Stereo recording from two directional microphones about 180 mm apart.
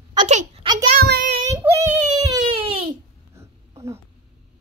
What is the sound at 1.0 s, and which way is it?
Child singing, 60° right (ahead or behind).